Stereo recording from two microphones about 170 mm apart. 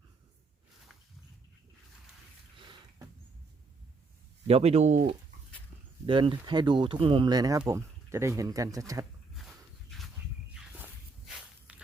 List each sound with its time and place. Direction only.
2.6 s a sound: 30° right (ahead or behind)
4.4 s speech: 40° right (ahead or behind)
6.1 s speech: 30° right (ahead or behind)
9.3 s dog: centre (ahead or behind)
10.5 s walk: 10° right (ahead or behind)